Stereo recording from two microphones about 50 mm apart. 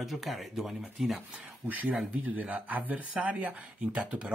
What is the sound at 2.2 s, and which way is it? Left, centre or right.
Speech, right.